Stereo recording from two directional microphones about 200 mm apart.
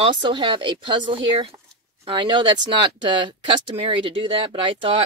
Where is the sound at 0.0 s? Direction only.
25° right (ahead or behind).